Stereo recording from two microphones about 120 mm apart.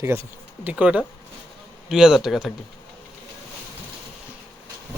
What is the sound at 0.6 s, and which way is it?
Speech, 10° right (ahead or behind).